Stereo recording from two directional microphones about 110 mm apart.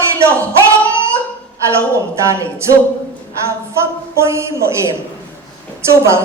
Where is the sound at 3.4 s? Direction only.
25° right (ahead or behind).